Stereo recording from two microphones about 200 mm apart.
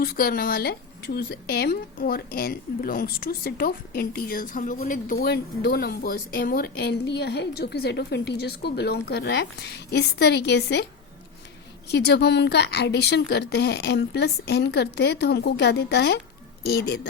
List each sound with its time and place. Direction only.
0.0 s speech: 50° left (ahead or behind)
11.9 s a woman's voice: 55° left (ahead or behind)